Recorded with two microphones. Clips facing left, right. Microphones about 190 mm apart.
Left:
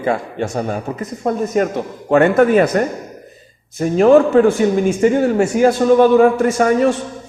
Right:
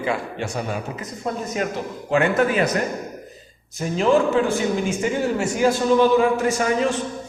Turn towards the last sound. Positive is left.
turn(degrees=50)  # may be behind; listen again after turning